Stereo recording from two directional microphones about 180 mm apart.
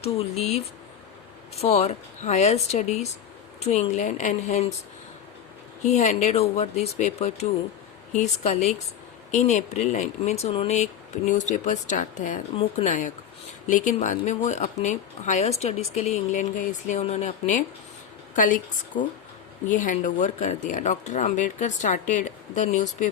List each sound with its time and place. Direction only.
0.0 s speech: 35° left (ahead or behind)
5.8 s speech: 40° left (ahead or behind)